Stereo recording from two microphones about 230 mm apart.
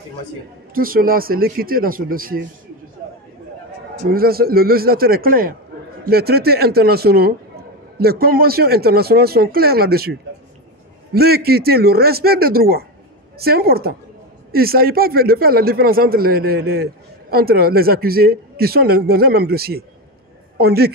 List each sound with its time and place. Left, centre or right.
0.7 s speech: right
4.1 s a man's voice: right
11.1 s a man's voice: right